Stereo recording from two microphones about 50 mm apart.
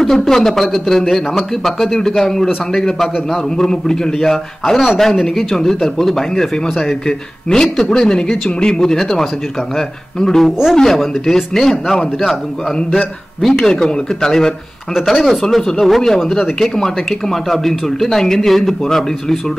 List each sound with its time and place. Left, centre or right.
0.0 s speech: centre
8.9 s speech: centre
13.4 s speech: centre